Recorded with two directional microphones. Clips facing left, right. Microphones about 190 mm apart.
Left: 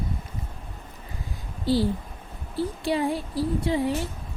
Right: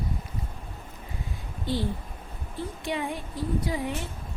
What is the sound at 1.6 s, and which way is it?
Speech, 35° left (ahead or behind).